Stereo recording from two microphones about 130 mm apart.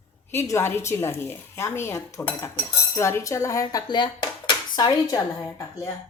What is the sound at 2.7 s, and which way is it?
Dishes, 20° left (ahead or behind).